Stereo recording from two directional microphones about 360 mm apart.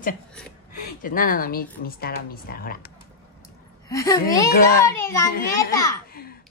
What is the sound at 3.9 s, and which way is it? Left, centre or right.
Speech, centre.